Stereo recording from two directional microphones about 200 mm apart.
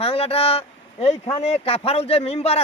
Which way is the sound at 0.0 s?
30° left (ahead or behind).